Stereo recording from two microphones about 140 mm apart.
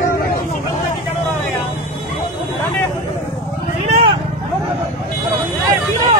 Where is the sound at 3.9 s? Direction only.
45° right (ahead or behind).